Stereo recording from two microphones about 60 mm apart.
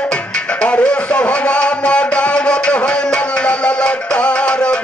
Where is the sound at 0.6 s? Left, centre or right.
Centre.